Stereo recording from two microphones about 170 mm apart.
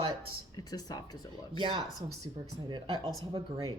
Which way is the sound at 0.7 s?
20° left (ahead or behind).